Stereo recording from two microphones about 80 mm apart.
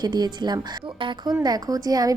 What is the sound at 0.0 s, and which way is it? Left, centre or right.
A woman's voice, right.